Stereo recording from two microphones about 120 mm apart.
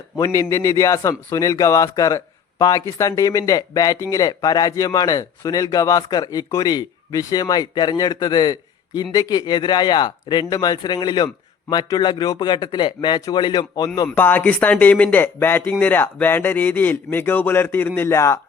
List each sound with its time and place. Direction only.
0.2 s speech: 25° left (ahead or behind)
14.2 s speech: 15° left (ahead or behind)